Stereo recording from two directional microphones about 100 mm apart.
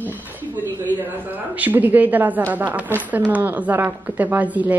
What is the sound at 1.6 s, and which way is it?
Speech, 15° right (ahead or behind).